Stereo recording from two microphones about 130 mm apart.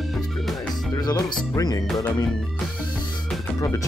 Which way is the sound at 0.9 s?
25° left (ahead or behind).